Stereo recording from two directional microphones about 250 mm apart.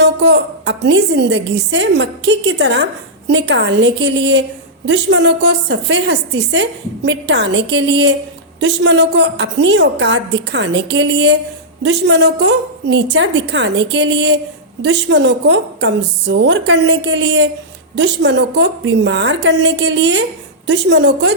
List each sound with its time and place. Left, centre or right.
0.0 s a woman's voice: right